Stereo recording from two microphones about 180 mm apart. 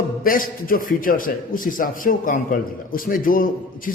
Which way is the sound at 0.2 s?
50° left (ahead or behind).